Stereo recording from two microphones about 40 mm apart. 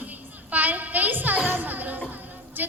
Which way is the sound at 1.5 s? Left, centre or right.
Right.